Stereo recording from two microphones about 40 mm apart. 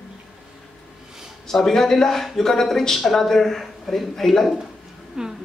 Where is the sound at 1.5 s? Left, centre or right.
Centre.